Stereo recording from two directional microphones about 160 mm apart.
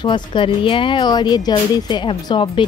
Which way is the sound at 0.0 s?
30° left (ahead or behind).